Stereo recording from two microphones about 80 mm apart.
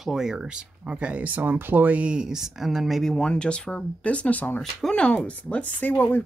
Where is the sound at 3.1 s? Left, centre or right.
Centre.